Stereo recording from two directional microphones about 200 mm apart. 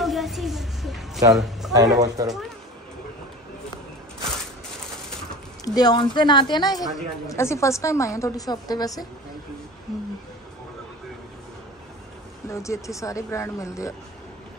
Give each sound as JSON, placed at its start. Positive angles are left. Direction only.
{"t": 0.0, "sound": "a sound", "side_deg": 0}
{"t": 1.3, "sound": "a man's voice", "side_deg": 0}
{"t": 1.7, "sound": "a man's voice", "side_deg": -15}
{"t": 5.7, "sound": "a woman's voice", "side_deg": 20}
{"t": 12.4, "sound": "a woman's voice", "side_deg": 15}